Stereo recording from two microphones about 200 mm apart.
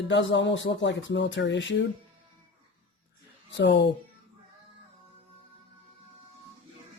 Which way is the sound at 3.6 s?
60° left (ahead or behind).